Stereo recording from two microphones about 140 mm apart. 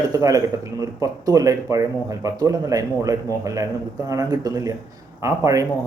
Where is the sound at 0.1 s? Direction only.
25° right (ahead or behind).